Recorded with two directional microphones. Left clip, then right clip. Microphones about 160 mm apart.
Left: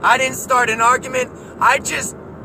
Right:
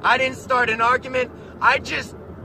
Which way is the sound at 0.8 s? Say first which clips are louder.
Left 4 dB; 10° right (ahead or behind).